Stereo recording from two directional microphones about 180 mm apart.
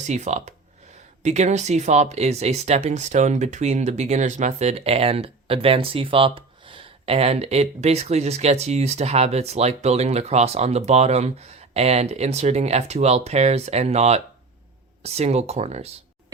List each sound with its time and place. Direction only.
0.0 s speech: 40° right (ahead or behind)